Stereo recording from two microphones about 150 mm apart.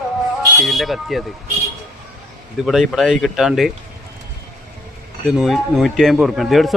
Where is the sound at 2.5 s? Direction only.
Centre (ahead or behind).